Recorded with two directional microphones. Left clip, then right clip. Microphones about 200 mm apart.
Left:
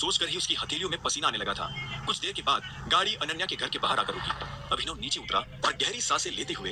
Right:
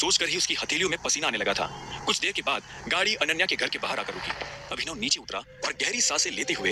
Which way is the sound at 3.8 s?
20° right (ahead or behind).